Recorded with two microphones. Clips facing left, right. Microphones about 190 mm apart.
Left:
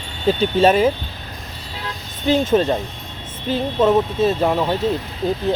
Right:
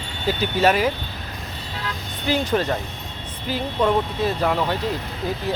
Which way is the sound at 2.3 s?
25° left (ahead or behind).